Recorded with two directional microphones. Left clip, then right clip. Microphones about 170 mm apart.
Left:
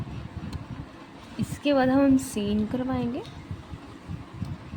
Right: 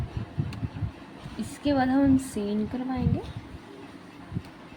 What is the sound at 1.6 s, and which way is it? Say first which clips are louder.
Speech: left 2 dB; 20° left (ahead or behind).